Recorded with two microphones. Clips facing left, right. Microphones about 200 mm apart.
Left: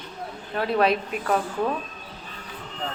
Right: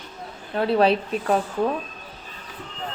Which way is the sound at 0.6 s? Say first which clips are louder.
Right 3 dB; 30° right (ahead or behind).